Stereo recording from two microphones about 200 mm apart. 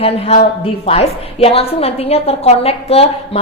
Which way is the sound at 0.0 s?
30° left (ahead or behind).